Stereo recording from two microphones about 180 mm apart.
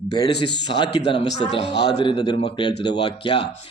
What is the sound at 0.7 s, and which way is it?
Speech, 30° left (ahead or behind).